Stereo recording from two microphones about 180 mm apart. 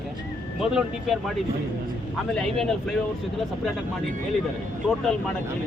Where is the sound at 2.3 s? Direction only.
5° left (ahead or behind).